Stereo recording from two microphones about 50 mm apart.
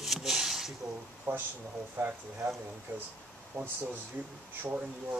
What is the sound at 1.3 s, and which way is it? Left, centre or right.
Speech, right.